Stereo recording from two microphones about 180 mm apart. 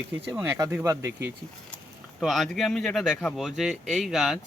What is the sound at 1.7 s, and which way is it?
Speech, centre (ahead or behind).